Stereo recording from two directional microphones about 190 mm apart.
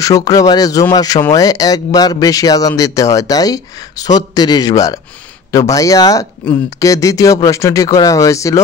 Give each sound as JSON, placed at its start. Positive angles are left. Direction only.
{"t": 0.0, "sound": "speech", "side_deg": 20}